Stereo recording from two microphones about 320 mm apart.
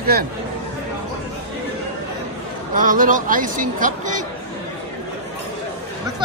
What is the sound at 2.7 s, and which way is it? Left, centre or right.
Speech, right.